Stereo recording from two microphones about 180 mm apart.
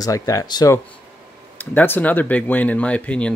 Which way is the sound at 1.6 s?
10° left (ahead or behind).